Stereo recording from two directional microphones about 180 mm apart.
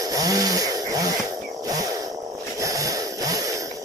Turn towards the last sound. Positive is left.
turn(degrees=-20)  # may be behind; listen again after turning